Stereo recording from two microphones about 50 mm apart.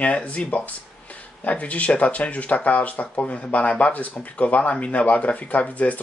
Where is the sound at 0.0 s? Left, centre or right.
Left.